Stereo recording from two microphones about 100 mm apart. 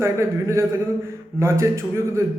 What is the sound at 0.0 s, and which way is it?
A man's voice, 30° right (ahead or behind).